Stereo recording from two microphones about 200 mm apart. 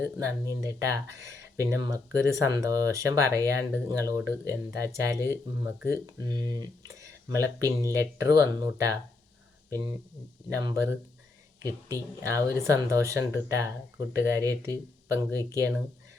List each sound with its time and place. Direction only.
0.0 s speech: 15° right (ahead or behind)